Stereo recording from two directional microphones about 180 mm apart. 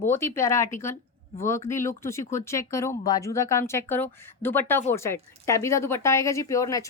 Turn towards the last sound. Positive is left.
turn(degrees=20)  # may be behind; listen again after turning